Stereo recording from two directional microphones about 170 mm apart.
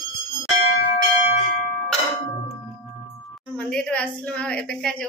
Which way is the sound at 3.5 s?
5° left (ahead or behind).